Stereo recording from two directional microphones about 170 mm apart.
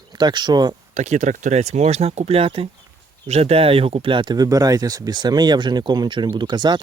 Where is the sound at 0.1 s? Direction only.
25° right (ahead or behind).